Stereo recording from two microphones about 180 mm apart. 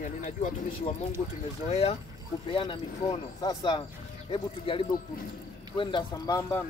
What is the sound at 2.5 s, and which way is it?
Speech, 25° left (ahead or behind).